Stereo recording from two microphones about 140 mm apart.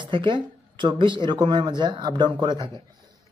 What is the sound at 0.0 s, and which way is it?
Speech, 35° right (ahead or behind).